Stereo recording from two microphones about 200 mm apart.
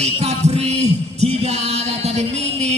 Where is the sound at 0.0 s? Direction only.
30° right (ahead or behind).